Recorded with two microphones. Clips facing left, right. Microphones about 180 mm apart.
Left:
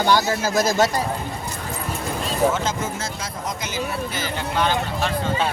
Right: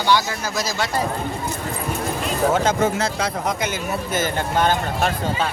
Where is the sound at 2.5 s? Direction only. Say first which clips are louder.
Right 6 dB; 65° right (ahead or behind).